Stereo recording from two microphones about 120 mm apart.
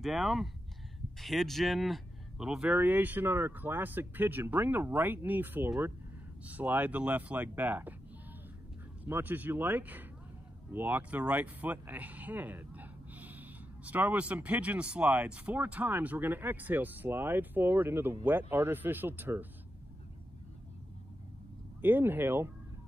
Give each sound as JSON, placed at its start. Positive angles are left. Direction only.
{"t": 0.0, "sound": "speech", "side_deg": 0}
{"t": 9.0, "sound": "speech", "side_deg": -15}
{"t": 21.8, "sound": "speech", "side_deg": -15}